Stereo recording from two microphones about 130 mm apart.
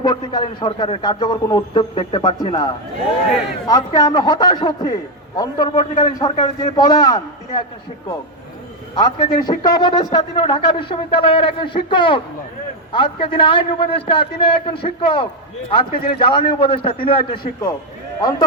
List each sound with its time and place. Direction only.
0.0 s a man's voice: 30° left (ahead or behind)
3.7 s a man's voice: 30° left (ahead or behind)
9.0 s a man's voice: 35° left (ahead or behind)